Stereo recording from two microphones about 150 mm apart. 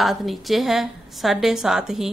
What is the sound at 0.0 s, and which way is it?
A woman's voice, centre (ahead or behind).